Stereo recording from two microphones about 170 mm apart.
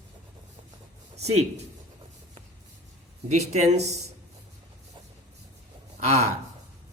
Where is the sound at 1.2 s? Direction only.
40° right (ahead or behind).